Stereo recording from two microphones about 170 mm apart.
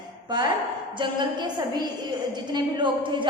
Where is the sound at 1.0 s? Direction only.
25° right (ahead or behind).